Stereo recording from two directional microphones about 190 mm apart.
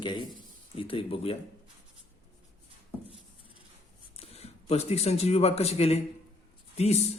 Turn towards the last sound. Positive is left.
turn(degrees=35)  # may be behind; listen again after turning